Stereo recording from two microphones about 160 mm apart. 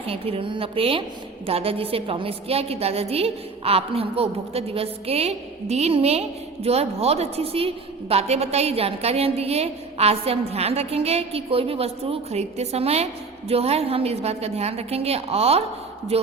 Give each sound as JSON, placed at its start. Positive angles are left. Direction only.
{"t": 0.1, "sound": "a woman's voice", "side_deg": -35}